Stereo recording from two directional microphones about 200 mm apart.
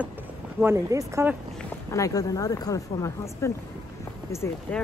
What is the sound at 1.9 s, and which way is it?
Speech, 15° left (ahead or behind).